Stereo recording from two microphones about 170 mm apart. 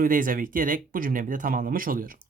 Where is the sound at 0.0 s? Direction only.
55° right (ahead or behind).